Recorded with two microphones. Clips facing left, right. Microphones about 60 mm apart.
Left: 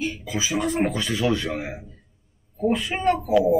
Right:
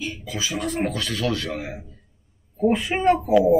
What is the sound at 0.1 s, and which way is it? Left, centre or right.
Speech, centre.